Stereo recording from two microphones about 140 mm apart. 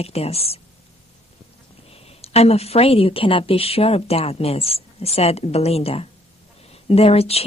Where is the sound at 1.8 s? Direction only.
45° left (ahead or behind).